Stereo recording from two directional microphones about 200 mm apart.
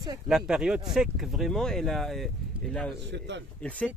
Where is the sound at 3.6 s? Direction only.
5° left (ahead or behind).